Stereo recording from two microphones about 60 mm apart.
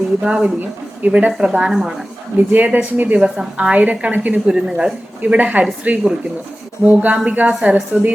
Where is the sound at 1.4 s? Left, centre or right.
Centre.